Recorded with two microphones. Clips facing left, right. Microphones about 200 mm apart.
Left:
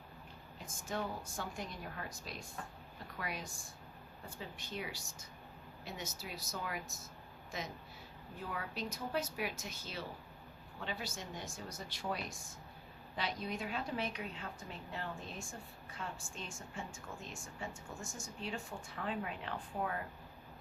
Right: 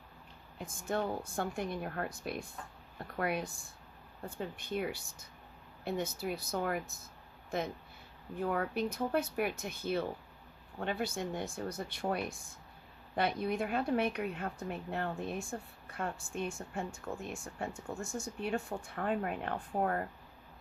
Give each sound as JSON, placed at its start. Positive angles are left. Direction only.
{"t": 0.6, "sound": "speech", "side_deg": -60}